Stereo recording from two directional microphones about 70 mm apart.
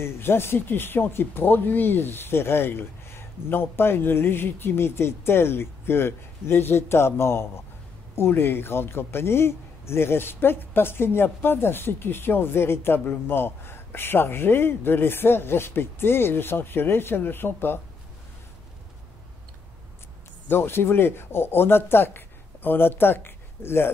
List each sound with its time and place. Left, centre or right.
0.0 s speech: left
20.4 s speech: left